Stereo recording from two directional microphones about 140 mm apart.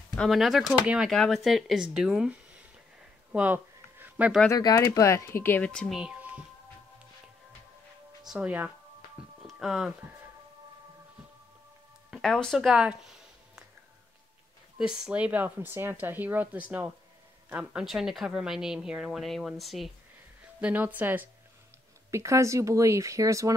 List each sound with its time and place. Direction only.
0.1 s speech: centre (ahead or behind)
3.3 s a sound: 10° right (ahead or behind)
4.5 s speech: 25° left (ahead or behind); by 5.9 s 5° left (ahead or behind)
8.3 s speech: 10° right (ahead or behind)
9.4 s music: 5° right (ahead or behind)
12.1 s speech: 5° left (ahead or behind)
14.8 s speech: 5° right (ahead or behind)
20.4 s speech: 10° right (ahead or behind)